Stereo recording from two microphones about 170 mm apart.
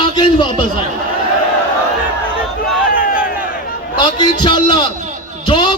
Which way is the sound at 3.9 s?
25° left (ahead or behind).